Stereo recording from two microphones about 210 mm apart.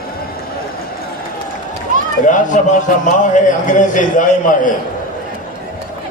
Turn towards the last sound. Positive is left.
turn(degrees=40)  # may be behind; listen again after turning